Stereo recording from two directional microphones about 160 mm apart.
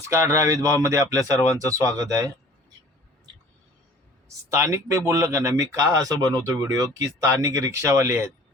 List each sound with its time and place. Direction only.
0.1 s speech: 20° right (ahead or behind)
4.5 s speech: 15° right (ahead or behind)